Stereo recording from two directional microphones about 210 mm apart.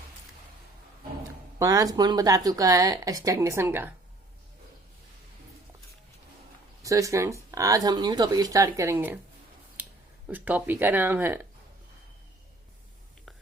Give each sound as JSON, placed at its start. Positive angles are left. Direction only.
{"t": 1.5, "sound": "speech", "side_deg": -15}
{"t": 6.8, "sound": "speech", "side_deg": -15}
{"t": 10.2, "sound": "speech", "side_deg": -5}